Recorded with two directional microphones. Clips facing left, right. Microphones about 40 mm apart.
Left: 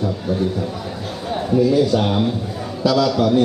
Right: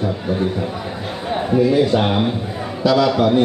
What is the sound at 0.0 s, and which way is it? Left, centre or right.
A man's voice, right.